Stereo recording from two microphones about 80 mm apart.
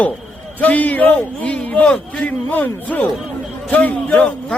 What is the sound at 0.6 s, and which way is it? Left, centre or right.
A man's voice, centre.